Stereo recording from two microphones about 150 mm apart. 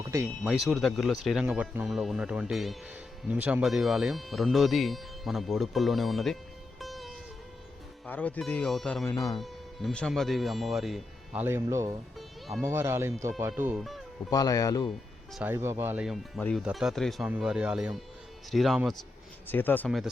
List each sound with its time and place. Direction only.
0.0 s a sound: 20° right (ahead or behind)
0.4 s speech: centre (ahead or behind)
8.0 s speech: 10° left (ahead or behind)
9.0 s speech: 20° left (ahead or behind)
9.4 s speech: 5° left (ahead or behind)
11.4 s speech: 20° right (ahead or behind)
13.7 s speech: centre (ahead or behind)
14.3 s speech: 25° left (ahead or behind)
15.5 s speech: 20° right (ahead or behind)
16.4 s speech: 10° left (ahead or behind)
19.5 s speech: 15° left (ahead or behind)